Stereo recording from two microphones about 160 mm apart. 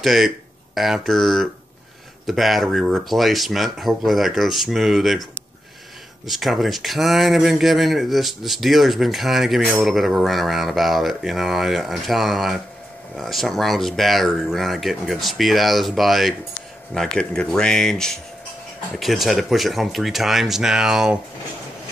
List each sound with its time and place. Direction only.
0.0 s speech: centre (ahead or behind)
6.2 s speech: centre (ahead or behind)